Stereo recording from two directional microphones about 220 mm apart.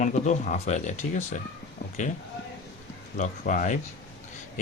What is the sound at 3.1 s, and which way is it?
Speech, 35° left (ahead or behind).